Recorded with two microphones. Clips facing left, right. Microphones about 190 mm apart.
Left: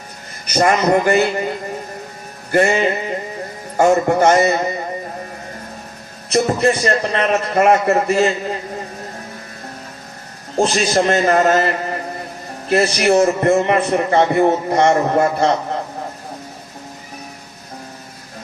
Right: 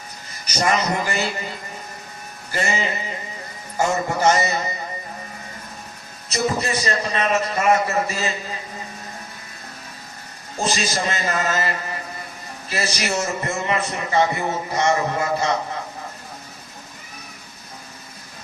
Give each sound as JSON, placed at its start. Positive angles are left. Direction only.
{"t": 0.4, "sound": "a man's voice", "side_deg": 55}
{"t": 6.2, "sound": "a man's voice", "side_deg": 55}
{"t": 10.6, "sound": "a man's voice", "side_deg": 60}